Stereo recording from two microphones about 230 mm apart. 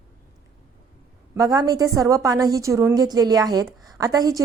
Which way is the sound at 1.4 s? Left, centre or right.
Centre.